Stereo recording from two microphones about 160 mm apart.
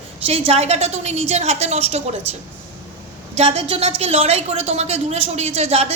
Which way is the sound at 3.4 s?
40° right (ahead or behind).